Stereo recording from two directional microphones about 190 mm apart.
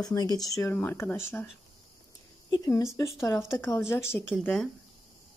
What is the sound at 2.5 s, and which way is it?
Speech, 20° left (ahead or behind).